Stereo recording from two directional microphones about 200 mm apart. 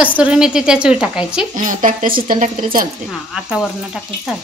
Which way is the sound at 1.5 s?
40° right (ahead or behind).